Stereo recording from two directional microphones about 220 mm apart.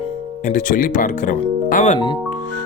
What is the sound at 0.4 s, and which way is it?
Speech, 35° left (ahead or behind).